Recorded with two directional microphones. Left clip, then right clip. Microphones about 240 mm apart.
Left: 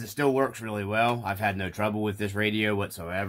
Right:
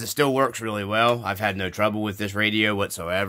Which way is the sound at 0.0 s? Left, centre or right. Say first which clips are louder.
Right 4 dB; right.